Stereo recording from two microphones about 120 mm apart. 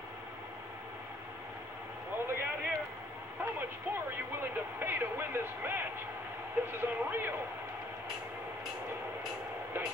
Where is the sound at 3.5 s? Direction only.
15° right (ahead or behind).